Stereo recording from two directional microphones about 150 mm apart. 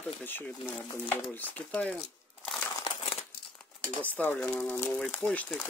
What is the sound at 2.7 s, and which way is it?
Crumpling, 30° left (ahead or behind).